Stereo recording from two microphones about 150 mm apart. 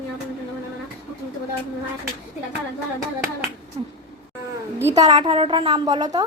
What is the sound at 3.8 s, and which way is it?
A woman's voice, 35° right (ahead or behind).